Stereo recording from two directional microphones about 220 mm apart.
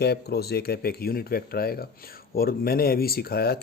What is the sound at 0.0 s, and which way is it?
Speech, 45° left (ahead or behind).